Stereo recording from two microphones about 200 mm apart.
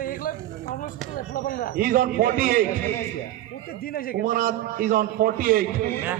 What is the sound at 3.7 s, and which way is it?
Speech, 50° left (ahead or behind).